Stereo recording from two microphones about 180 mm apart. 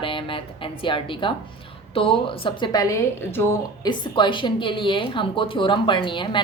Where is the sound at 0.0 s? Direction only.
30° left (ahead or behind).